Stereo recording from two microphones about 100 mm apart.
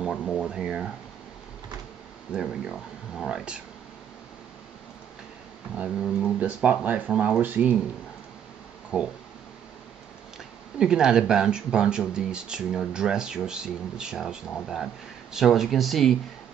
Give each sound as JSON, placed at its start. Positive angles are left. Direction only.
{"t": 0.1, "sound": "speech", "side_deg": 15}
{"t": 0.4, "sound": "speech", "side_deg": -10}
{"t": 2.3, "sound": "speech", "side_deg": -10}
{"t": 5.9, "sound": "speech", "side_deg": 0}
{"t": 6.4, "sound": "speech", "side_deg": -15}
{"t": 8.9, "sound": "speech", "side_deg": -10}
{"t": 10.8, "sound": "speech", "side_deg": -10}